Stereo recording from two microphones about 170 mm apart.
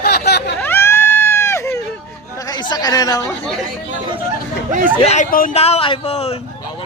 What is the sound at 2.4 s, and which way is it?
Speech, 25° left (ahead or behind).